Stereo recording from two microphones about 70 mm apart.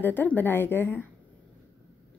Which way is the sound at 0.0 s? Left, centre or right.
Left.